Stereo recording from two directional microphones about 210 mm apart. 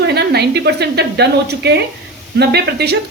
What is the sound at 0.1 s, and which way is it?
A woman's voice, 50° right (ahead or behind).